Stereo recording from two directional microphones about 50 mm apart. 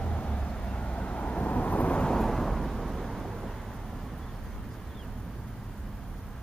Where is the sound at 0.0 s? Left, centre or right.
Left.